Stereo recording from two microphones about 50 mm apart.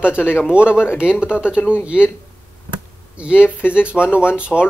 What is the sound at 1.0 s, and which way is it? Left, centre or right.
Speech, right.